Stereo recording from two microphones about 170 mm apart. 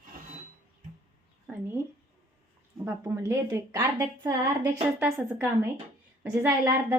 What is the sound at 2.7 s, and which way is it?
A woman's voice, 15° right (ahead or behind).